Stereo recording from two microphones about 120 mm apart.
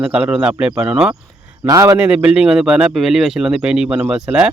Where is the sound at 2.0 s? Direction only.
10° right (ahead or behind).